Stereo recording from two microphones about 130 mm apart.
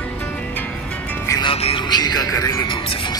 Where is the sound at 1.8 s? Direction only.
30° left (ahead or behind).